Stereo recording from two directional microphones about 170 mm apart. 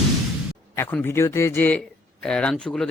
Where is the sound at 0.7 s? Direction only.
15° left (ahead or behind).